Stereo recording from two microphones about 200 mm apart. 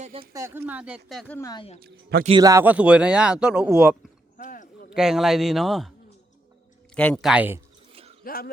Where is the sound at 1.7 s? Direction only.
50° right (ahead or behind).